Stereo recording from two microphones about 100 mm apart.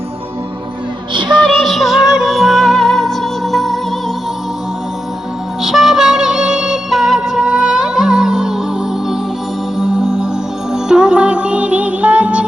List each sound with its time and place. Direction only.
1.1 s music: 55° right (ahead or behind)
1.5 s music: centre (ahead or behind)
5.6 s music: 5° right (ahead or behind)
9.7 s music: 5° right (ahead or behind)